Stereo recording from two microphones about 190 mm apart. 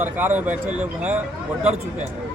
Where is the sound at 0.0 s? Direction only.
10° right (ahead or behind).